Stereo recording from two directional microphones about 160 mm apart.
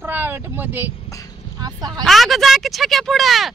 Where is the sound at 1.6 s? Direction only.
25° right (ahead or behind).